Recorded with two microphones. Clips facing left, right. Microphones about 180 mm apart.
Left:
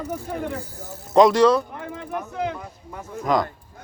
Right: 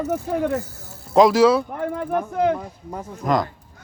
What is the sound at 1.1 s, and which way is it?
Speech, 5° right (ahead or behind).